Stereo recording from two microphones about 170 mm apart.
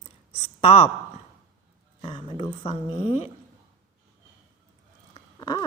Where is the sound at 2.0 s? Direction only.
30° left (ahead or behind).